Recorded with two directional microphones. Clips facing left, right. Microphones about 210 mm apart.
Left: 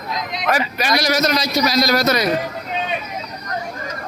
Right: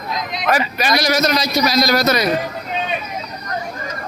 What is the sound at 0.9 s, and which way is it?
A man's voice, 55° right (ahead or behind).